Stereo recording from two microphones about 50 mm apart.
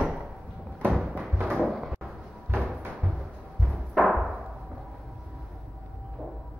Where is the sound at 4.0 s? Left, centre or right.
Centre.